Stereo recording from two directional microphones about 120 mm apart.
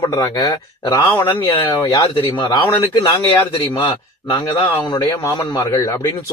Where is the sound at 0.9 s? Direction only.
25° left (ahead or behind).